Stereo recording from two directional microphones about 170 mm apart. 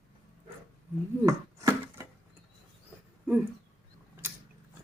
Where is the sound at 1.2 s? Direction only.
15° right (ahead or behind).